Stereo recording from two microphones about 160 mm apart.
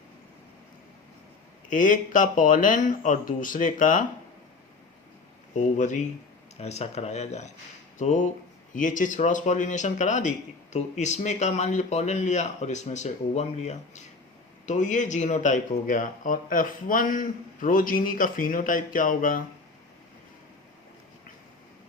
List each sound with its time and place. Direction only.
1.7 s speech: 55° left (ahead or behind)
5.5 s speech: 50° left (ahead or behind)